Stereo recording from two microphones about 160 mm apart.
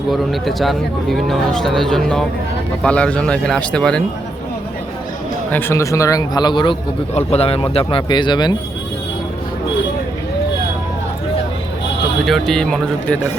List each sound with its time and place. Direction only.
0.1 s speech: centre (ahead or behind)
5.5 s a man's voice: 15° left (ahead or behind)
12.2 s speech: centre (ahead or behind)